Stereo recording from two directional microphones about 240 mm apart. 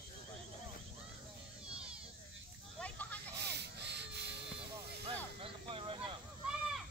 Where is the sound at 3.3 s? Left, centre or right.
Right.